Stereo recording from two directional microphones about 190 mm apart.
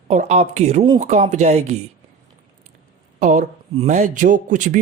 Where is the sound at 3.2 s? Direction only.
40° right (ahead or behind).